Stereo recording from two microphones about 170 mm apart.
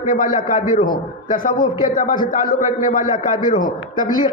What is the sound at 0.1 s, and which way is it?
A man's voice, 50° left (ahead or behind).